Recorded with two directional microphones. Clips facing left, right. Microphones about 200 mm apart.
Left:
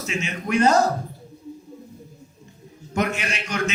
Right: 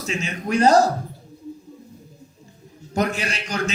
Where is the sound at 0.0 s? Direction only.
35° right (ahead or behind).